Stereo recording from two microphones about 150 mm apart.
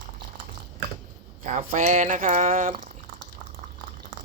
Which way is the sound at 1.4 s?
55° right (ahead or behind).